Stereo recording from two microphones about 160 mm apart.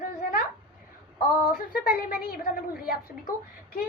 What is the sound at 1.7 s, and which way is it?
A woman's voice, 70° left (ahead or behind).